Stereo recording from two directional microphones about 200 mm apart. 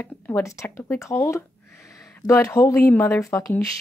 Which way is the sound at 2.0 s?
5° left (ahead or behind).